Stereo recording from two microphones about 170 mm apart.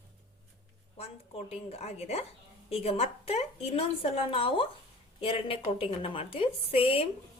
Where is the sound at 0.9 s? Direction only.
40° left (ahead or behind).